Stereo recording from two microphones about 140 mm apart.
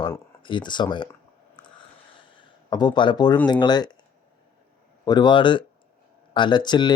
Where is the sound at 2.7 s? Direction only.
30° left (ahead or behind).